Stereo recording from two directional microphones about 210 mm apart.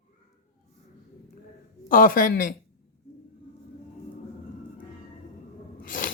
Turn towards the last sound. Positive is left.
turn(degrees=40)  # may be behind; listen again after turning